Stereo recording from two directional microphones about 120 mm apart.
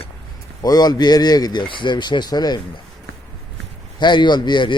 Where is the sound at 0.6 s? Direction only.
35° left (ahead or behind).